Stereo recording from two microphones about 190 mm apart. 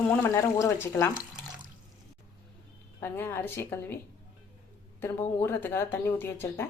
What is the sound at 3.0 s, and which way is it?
Speech, 10° left (ahead or behind).